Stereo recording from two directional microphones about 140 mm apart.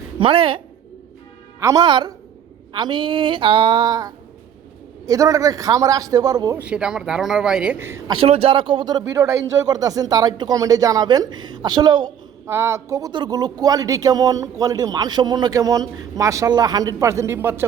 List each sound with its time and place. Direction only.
0.2 s a woman's voice: 40° right (ahead or behind)
1.5 s a man's voice: 20° right (ahead or behind)
1.8 s a woman's voice: 35° right (ahead or behind)
6.6 s a man's voice: 5° right (ahead or behind)
8.1 s speech: 40° right (ahead or behind)
12.5 s speech: 20° right (ahead or behind)